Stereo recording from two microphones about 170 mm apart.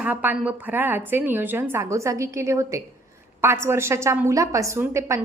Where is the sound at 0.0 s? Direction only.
10° right (ahead or behind).